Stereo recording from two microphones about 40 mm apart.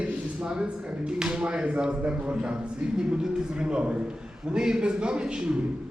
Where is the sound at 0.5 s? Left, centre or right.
Right.